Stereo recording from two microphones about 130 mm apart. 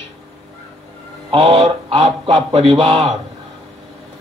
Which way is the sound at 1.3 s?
50° right (ahead or behind).